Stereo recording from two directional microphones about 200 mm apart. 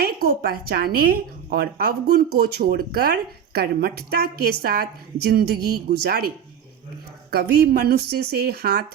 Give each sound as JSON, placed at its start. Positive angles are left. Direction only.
{"t": 0.0, "sound": "a woman's voice", "side_deg": -50}